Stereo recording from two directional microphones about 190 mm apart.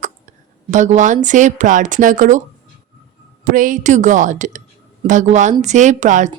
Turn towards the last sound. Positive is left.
turn(degrees=-40)  # may be behind; listen again after turning